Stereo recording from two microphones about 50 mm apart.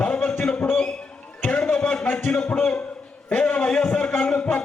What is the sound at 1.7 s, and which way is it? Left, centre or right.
A man's voice, left.